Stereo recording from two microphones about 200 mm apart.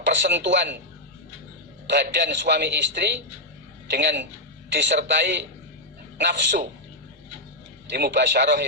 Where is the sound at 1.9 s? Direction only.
60° right (ahead or behind).